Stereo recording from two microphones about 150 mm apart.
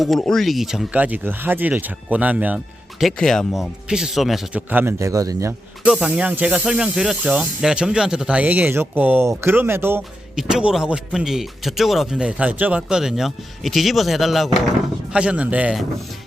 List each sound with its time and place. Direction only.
0.0 s speech: centre (ahead or behind)
3.0 s a man's voice: centre (ahead or behind)
4.7 s a man's voice: 15° right (ahead or behind)
5.8 s speech: 5° right (ahead or behind)
10.3 s a man's voice: 5° right (ahead or behind)